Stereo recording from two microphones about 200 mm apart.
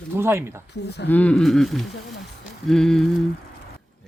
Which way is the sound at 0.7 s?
60° left (ahead or behind).